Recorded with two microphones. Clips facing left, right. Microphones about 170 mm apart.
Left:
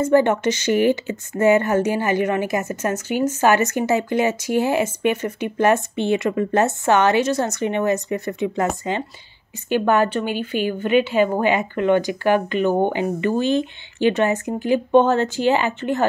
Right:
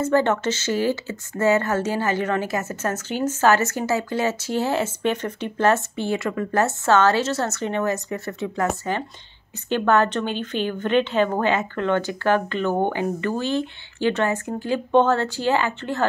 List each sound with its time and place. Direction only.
0.0 s speech: 15° left (ahead or behind)